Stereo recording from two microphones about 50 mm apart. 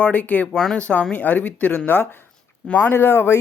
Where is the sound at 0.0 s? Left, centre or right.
Left.